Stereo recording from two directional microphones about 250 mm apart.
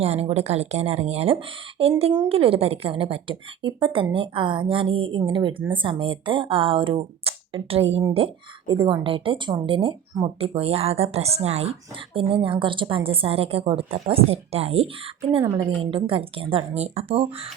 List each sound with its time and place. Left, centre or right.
0.0 s speech: right